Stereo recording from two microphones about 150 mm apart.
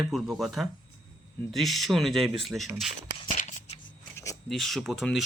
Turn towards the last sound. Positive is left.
turn(degrees=0)  # may be behind; listen again after turning